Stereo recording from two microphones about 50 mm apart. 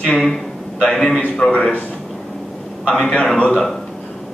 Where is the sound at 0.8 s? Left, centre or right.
Centre.